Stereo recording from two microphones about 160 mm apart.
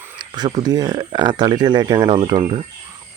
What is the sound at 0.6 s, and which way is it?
Speech, 25° right (ahead or behind).